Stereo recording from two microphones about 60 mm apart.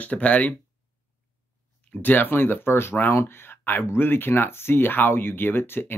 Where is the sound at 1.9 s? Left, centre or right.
Left.